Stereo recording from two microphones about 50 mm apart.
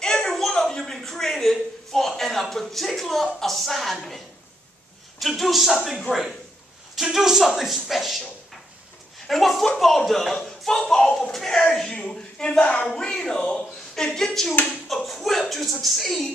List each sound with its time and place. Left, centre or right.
0.0 s a sound: centre
2.5 s speech: centre
5.2 s speech: centre
7.0 s speech: centre
9.3 s speech: centre